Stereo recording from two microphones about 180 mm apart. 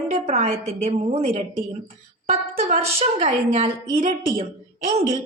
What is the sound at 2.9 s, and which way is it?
A woman's voice, 40° right (ahead or behind).